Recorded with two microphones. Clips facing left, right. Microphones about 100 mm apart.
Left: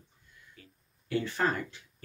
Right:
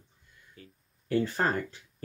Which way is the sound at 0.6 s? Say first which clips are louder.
Right 4 dB; 40° right (ahead or behind).